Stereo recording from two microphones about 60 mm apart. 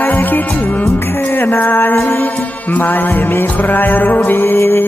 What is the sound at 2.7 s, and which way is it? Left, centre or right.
Music, left.